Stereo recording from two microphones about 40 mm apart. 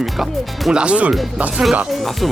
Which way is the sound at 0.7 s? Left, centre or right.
Right.